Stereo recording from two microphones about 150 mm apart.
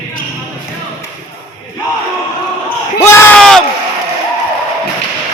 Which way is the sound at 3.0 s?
15° left (ahead or behind).